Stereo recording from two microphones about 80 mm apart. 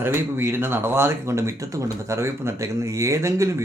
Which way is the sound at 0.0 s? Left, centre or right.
Right.